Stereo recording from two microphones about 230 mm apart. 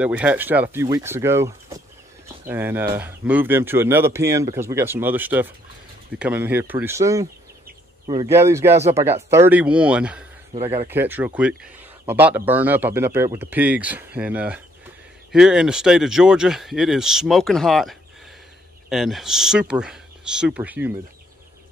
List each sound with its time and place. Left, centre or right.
0.0 s speech: centre
10.5 s speech: right
10.9 s speech: centre